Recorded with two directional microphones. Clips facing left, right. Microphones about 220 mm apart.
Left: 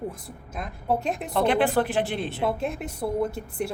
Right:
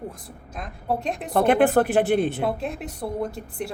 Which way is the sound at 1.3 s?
50° right (ahead or behind).